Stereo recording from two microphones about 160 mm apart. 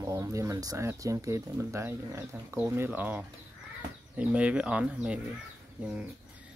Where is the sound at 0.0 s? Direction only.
20° right (ahead or behind).